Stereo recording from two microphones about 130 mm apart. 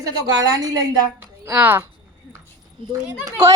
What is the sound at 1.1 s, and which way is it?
Speech, 15° right (ahead or behind).